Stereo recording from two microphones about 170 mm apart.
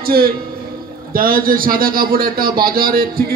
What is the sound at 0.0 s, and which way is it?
A man's voice, 60° right (ahead or behind).